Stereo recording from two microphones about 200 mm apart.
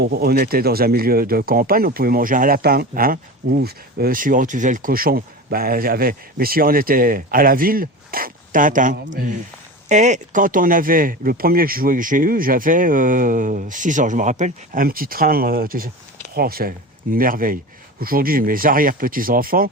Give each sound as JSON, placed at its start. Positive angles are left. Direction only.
{"t": 0.0, "sound": "speech", "side_deg": -50}